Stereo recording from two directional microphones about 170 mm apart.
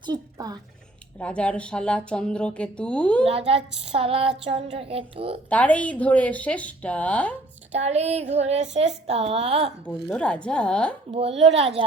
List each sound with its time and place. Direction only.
0.0 s a woman's voice: 25° right (ahead or behind)
1.2 s speech: 5° left (ahead or behind)
3.2 s a woman's voice: 35° right (ahead or behind)
5.5 s speech: 10° left (ahead or behind)
7.7 s a woman's voice: 40° right (ahead or behind)
10.1 s speech: 5° left (ahead or behind)
11.1 s a woman's voice: 35° right (ahead or behind)